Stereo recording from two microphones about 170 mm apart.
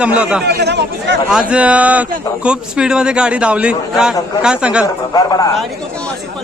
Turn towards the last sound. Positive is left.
turn(degrees=25)  # may be behind; listen again after turning